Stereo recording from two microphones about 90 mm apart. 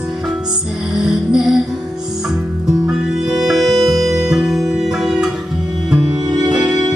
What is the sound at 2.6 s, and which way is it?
Music, 5° right (ahead or behind).